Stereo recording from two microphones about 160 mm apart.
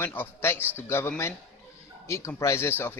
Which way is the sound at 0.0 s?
15° left (ahead or behind).